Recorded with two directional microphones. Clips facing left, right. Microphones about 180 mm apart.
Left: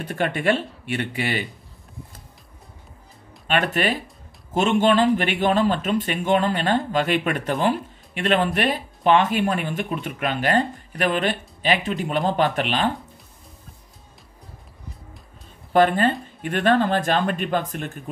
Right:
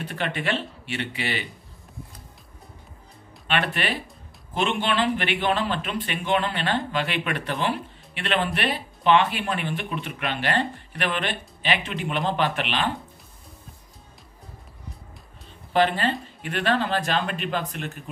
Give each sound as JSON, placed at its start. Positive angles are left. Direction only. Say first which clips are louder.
{"t": 0.0, "sound": "a man's voice", "louder": "left 6 dB", "side_deg": 45}
{"t": 3.4, "sound": "a man's voice", "louder": "left 4 dB", "side_deg": 45}
{"t": 15.7, "sound": "a man's voice", "louder": "left 4 dB", "side_deg": 45}